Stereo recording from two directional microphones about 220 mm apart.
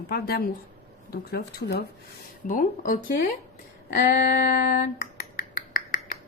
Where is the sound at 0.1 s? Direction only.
45° left (ahead or behind).